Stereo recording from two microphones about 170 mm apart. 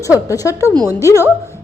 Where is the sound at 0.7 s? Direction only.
20° right (ahead or behind).